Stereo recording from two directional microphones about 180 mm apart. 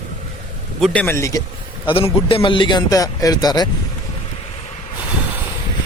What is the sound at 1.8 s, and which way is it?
A man's voice, 30° left (ahead or behind).